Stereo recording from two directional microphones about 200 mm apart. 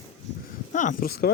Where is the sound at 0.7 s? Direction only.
40° left (ahead or behind).